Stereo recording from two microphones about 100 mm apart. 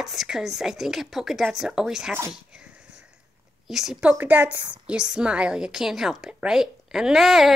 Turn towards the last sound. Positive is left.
turn(degrees=0)  # may be behind; listen again after turning